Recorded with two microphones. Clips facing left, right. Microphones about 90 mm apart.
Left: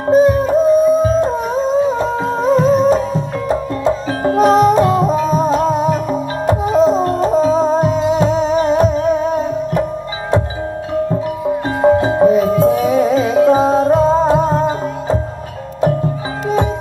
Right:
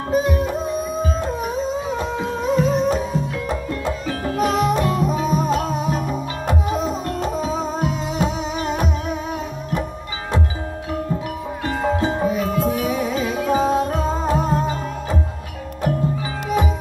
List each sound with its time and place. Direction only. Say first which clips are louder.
0.1 s howl: left 10 dB; 35° left (ahead or behind)
4.4 s music: left 9 dB; 35° left (ahead or behind)
11.8 s music: left 10 dB; 40° left (ahead or behind)